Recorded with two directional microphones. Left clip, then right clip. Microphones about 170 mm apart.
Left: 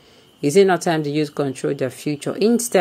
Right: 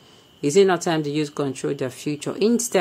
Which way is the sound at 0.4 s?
20° left (ahead or behind).